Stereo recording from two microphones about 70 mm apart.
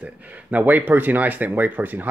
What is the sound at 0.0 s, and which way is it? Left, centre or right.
Speech, right.